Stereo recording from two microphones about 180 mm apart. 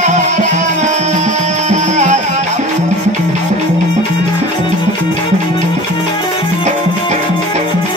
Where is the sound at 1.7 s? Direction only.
40° right (ahead or behind).